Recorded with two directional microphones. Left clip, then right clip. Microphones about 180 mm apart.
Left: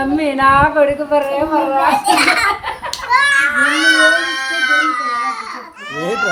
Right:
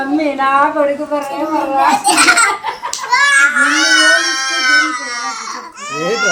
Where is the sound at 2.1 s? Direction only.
5° left (ahead or behind).